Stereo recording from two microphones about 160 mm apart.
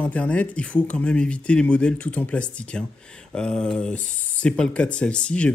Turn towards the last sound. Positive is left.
turn(degrees=5)  # may be behind; listen again after turning